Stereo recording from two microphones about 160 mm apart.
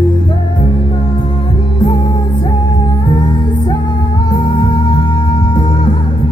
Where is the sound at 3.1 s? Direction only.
30° left (ahead or behind).